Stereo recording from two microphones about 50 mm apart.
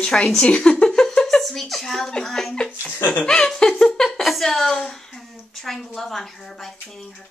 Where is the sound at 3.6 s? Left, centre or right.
Centre.